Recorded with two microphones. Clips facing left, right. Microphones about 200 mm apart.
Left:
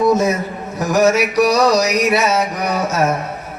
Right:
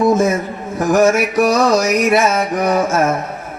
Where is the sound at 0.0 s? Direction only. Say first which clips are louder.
Right 1 dB; 50° right (ahead or behind).